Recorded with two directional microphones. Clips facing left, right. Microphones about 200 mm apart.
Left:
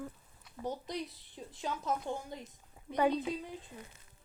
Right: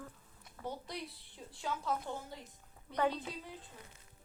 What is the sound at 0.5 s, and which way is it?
A woman's voice, 20° left (ahead or behind).